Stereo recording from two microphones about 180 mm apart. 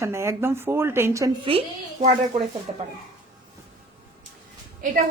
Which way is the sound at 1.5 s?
35° right (ahead or behind).